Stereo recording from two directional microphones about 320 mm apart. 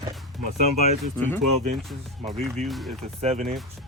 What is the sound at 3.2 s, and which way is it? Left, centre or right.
Speech, right.